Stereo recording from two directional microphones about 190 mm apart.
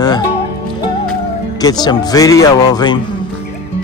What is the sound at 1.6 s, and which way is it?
Speech, 20° left (ahead or behind).